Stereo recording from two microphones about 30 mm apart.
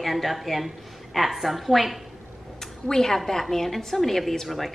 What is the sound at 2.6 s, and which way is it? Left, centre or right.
A woman's voice, centre.